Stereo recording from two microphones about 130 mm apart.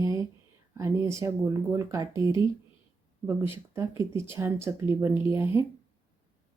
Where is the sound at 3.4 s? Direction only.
20° right (ahead or behind).